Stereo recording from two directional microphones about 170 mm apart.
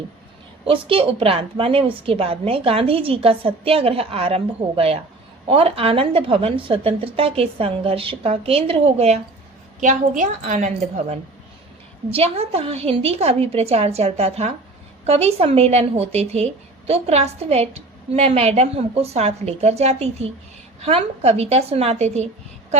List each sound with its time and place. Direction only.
0.7 s a woman's voice: 30° right (ahead or behind)
9.8 s a woman's voice: 45° right (ahead or behind)
12.0 s a woman's voice: 35° right (ahead or behind)